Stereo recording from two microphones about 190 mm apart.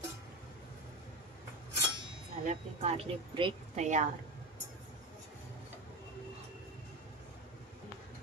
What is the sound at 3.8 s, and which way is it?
Speech, 40° right (ahead or behind).